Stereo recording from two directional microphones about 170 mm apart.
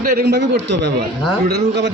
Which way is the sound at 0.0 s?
55° right (ahead or behind).